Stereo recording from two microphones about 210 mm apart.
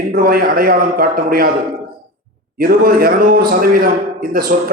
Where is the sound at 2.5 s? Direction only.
45° right (ahead or behind).